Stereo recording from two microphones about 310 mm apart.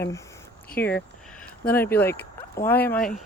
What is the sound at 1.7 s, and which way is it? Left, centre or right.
Speech, centre.